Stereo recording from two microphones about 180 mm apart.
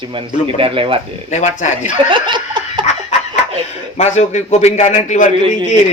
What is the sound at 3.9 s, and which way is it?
A man's voice, 40° left (ahead or behind).